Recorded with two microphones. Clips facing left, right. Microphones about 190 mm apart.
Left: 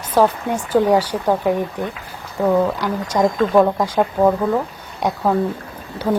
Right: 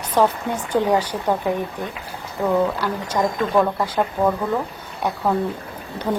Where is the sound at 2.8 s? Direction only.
10° left (ahead or behind).